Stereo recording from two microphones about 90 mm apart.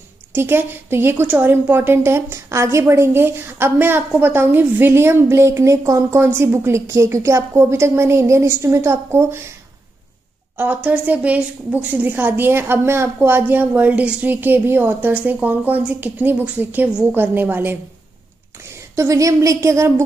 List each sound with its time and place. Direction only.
0.3 s a woman's voice: 25° right (ahead or behind)
10.6 s a woman's voice: 20° right (ahead or behind)
18.7 s a woman's voice: 35° right (ahead or behind)